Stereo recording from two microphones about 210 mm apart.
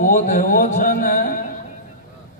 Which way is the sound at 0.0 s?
40° left (ahead or behind).